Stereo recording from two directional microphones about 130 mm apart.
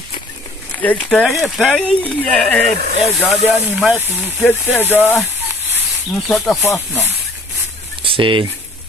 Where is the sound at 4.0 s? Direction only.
15° left (ahead or behind).